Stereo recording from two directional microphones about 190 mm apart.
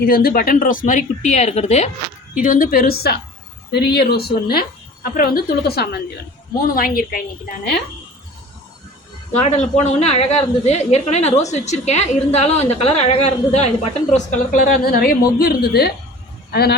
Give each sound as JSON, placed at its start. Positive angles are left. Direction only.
{"t": 0.0, "sound": "speech", "side_deg": 50}
{"t": 9.4, "sound": "a woman's voice", "side_deg": 35}